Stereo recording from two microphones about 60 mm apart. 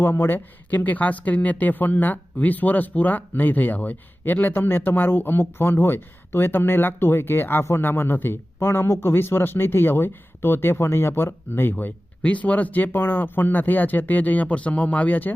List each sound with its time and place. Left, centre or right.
0.0 s speech: left
0.3 s speech: left